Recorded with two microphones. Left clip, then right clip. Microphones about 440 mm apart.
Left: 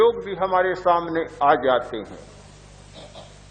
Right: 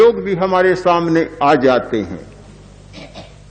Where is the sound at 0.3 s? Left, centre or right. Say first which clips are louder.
Right 7 dB; centre.